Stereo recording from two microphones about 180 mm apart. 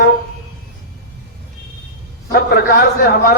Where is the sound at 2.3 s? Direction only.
60° left (ahead or behind).